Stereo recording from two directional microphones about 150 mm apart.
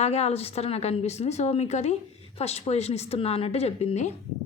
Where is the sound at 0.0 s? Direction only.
45° left (ahead or behind).